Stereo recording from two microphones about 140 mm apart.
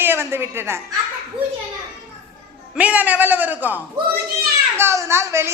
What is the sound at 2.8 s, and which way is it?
A man's voice, 10° right (ahead or behind).